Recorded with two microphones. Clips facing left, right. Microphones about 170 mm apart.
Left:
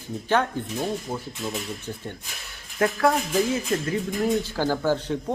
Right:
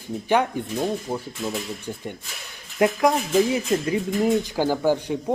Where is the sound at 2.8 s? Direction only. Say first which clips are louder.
Right 2 dB; 15° right (ahead or behind).